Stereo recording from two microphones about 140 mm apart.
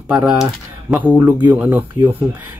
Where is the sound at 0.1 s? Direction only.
5° right (ahead or behind).